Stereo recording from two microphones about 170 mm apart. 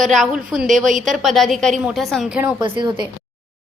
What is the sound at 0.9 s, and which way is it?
Speech, 50° right (ahead or behind).